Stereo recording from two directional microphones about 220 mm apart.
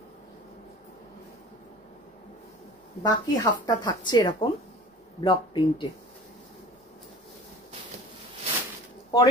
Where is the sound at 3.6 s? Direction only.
20° left (ahead or behind).